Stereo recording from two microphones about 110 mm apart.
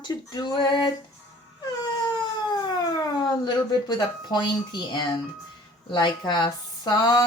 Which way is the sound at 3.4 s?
40° left (ahead or behind).